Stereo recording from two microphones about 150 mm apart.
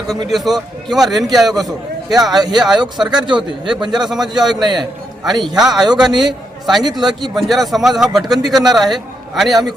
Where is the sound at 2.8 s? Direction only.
30° right (ahead or behind).